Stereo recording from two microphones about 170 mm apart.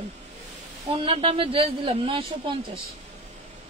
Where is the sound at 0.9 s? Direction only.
30° right (ahead or behind).